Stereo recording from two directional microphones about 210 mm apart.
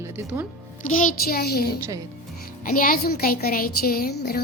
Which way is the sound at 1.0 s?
45° left (ahead or behind).